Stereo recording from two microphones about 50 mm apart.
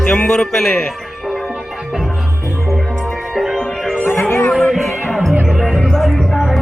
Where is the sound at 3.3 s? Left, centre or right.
Centre.